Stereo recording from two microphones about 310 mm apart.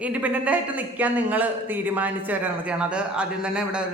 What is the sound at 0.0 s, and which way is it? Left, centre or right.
A man's voice, centre.